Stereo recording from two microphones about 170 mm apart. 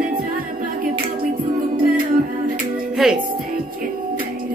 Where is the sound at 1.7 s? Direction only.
55° right (ahead or behind).